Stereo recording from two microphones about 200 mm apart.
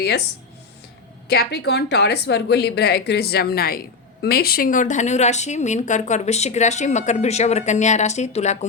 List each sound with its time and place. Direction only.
1.3 s a woman's voice: 55° left (ahead or behind); by 8.5 s 35° left (ahead or behind)